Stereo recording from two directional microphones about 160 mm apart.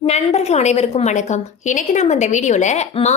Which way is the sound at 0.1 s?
40° left (ahead or behind).